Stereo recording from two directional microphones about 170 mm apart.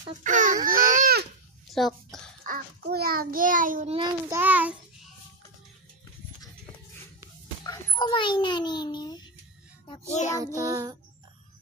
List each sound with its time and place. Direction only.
0.2 s speech: 50° right (ahead or behind)
1.7 s a sound: centre (ahead or behind)
2.4 s a child's voice: 60° right (ahead or behind)
4.3 s child singing: 10° right (ahead or behind)
7.9 s a child's voice: 30° left (ahead or behind)
10.0 s child singing: 45° left (ahead or behind)
10.3 s child singing: 20° right (ahead or behind)